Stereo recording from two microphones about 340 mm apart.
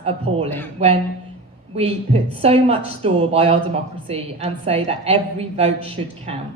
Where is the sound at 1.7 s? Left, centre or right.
Centre.